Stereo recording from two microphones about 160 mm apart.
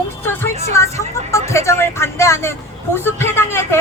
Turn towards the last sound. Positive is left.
turn(degrees=15)  # may be behind; listen again after turning